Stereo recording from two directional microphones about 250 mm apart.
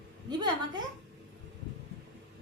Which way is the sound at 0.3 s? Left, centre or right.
Centre.